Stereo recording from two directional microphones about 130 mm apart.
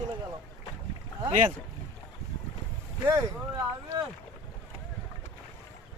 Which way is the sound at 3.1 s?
30° right (ahead or behind).